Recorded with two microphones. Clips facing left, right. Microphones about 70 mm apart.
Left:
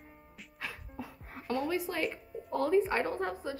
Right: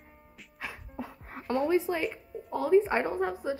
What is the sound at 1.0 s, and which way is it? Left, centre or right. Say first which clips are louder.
Music: right 5 dB; right.